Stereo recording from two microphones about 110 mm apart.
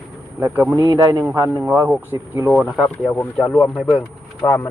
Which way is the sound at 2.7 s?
Centre (ahead or behind).